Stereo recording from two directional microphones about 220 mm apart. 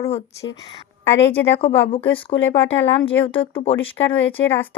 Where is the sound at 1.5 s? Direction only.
25° left (ahead or behind).